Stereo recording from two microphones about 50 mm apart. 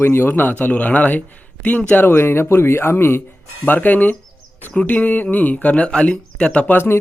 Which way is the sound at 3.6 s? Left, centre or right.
Left.